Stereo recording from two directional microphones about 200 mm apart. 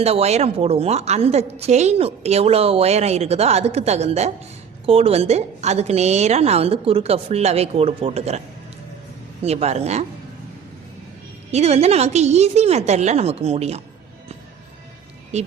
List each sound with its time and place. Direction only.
0.0 s a woman's voice: 30° right (ahead or behind)
9.4 s a woman's voice: 30° right (ahead or behind)
11.5 s a woman's voice: 30° right (ahead or behind)
15.3 s a woman's voice: 35° right (ahead or behind)